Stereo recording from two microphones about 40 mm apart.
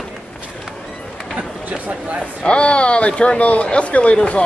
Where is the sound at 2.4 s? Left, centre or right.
Left.